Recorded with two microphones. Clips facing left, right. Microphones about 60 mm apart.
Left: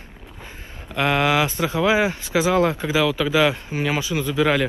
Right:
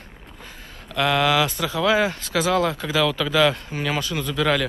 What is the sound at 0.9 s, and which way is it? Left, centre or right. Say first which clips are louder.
Speech: even; left.